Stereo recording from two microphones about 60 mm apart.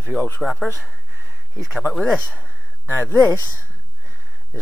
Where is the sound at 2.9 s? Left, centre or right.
Left.